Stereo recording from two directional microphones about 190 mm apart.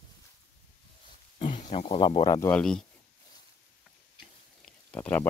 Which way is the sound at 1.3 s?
35° left (ahead or behind).